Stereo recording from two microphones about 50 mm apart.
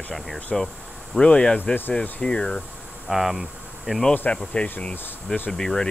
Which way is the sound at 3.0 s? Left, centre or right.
Centre.